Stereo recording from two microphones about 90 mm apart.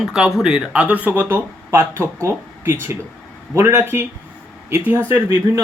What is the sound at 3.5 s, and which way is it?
Speech, 30° right (ahead or behind).